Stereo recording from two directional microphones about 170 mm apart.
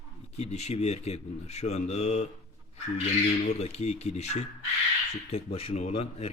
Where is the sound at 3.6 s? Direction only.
40° left (ahead or behind).